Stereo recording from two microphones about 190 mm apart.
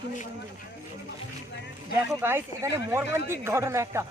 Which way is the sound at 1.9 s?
10° right (ahead or behind).